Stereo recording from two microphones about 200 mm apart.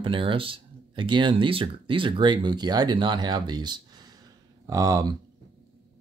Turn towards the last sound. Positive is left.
turn(degrees=-15)  # may be behind; listen again after turning